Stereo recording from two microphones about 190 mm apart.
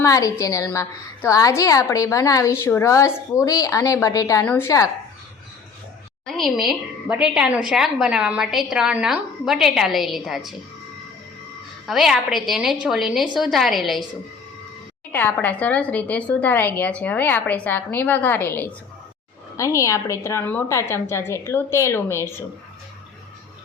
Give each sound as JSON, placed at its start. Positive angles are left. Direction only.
{"t": 0.0, "sound": "a woman's voice", "side_deg": 15}
{"t": 6.2, "sound": "a woman's voice", "side_deg": 0}
{"t": 11.9, "sound": "a woman's voice", "side_deg": 0}
{"t": 15.1, "sound": "a woman's voice", "side_deg": 10}